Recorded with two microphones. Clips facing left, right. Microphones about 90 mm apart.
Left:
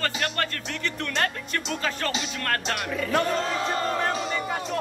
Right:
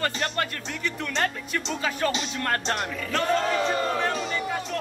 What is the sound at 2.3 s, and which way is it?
Speech, 20° right (ahead or behind).